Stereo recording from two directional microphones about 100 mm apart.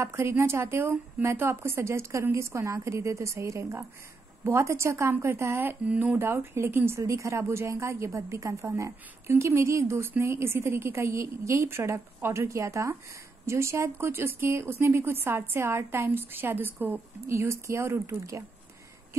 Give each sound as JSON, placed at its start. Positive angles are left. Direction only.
{"t": 0.0, "sound": "speech", "side_deg": -25}